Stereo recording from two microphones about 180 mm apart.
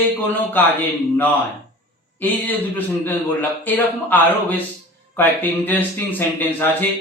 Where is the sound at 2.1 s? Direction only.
10° left (ahead or behind).